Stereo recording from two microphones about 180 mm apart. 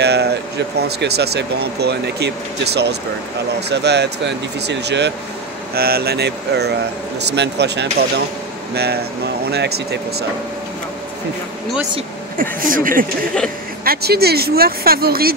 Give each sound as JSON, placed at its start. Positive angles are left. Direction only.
{"t": 0.0, "sound": "speech", "side_deg": -65}
{"t": 5.8, "sound": "speech", "side_deg": -60}
{"t": 12.4, "sound": "speech", "side_deg": -50}
{"t": 13.8, "sound": "speech", "side_deg": -60}